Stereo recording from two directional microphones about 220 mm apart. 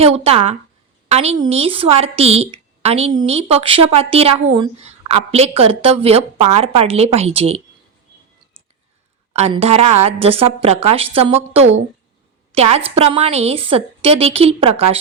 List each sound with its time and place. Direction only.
0.0 s speech: 25° right (ahead or behind)
9.3 s speech: 30° right (ahead or behind)